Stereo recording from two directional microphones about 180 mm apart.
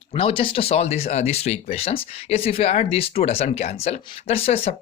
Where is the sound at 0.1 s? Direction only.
30° left (ahead or behind).